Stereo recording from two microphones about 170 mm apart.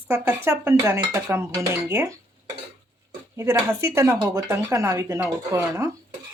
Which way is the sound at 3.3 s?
15° right (ahead or behind).